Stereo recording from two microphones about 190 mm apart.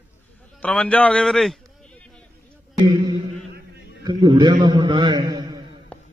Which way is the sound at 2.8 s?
20° right (ahead or behind).